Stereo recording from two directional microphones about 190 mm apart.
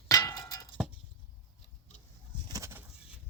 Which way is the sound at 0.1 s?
20° left (ahead or behind).